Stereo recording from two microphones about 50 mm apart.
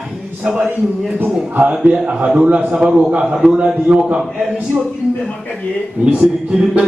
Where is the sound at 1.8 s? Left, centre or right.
Right.